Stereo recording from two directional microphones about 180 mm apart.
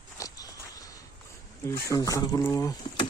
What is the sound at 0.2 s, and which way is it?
Walk, 20° left (ahead or behind).